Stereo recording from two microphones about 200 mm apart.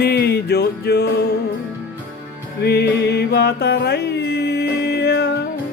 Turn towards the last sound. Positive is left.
turn(degrees=55)  # may be behind; listen again after turning